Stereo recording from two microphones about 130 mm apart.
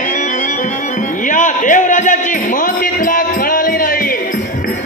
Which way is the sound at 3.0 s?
90° left.